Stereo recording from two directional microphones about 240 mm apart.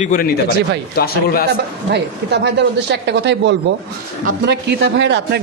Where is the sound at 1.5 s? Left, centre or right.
Right.